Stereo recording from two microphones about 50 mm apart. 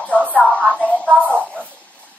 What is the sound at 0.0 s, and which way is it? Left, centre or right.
Music, left.